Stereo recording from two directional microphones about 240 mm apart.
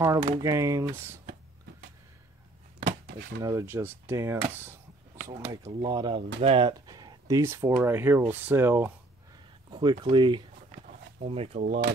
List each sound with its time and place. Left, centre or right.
0.0 s speech: centre
3.3 s speech: centre
5.3 s speech: centre